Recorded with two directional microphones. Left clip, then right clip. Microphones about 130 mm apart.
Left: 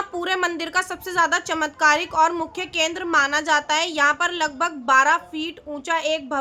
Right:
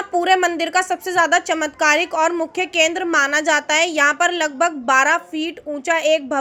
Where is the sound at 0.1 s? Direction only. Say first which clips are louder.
Right 11 dB; 15° right (ahead or behind).